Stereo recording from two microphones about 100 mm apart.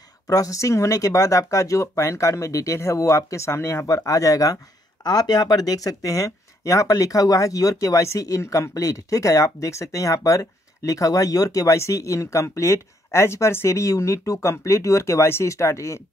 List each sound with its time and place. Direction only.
0.3 s speech: 35° left (ahead or behind)